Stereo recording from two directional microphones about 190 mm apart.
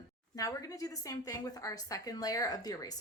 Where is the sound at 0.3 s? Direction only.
20° left (ahead or behind).